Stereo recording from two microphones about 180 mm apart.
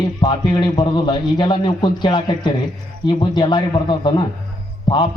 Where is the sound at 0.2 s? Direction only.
25° left (ahead or behind).